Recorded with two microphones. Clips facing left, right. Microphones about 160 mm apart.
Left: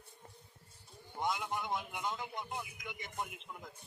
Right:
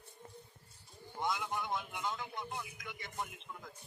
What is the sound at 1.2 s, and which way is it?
A man's voice, 20° left (ahead or behind).